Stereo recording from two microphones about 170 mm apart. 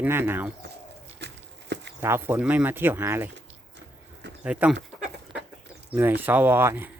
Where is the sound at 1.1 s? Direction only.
90° right.